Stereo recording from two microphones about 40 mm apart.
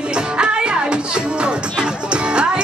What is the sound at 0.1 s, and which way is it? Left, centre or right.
Music, right.